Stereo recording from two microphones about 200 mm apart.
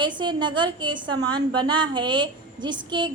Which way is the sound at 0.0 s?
25° right (ahead or behind).